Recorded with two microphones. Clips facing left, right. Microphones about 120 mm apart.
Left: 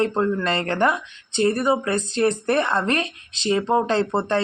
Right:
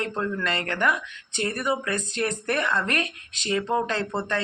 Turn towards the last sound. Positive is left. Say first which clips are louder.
# left 7 dB
turn(degrees=30)  # may be behind; listen again after turning